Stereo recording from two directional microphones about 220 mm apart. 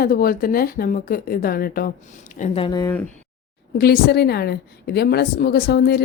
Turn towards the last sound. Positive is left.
turn(degrees=45)  # may be behind; listen again after turning